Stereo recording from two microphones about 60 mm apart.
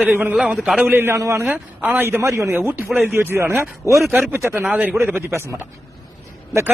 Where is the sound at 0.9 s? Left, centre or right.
Right.